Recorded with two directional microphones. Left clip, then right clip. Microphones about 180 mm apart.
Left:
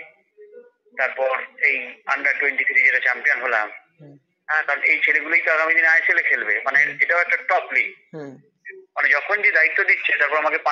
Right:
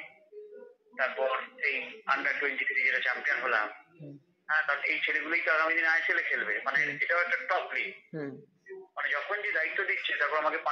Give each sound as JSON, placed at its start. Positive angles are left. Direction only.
{"t": 0.9, "sound": "a man's voice", "side_deg": 25}
{"t": 8.9, "sound": "speech", "side_deg": 45}